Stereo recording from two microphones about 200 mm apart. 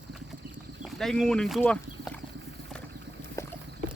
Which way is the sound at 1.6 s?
5° left (ahead or behind).